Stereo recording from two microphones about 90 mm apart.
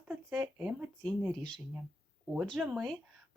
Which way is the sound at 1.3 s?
10° left (ahead or behind).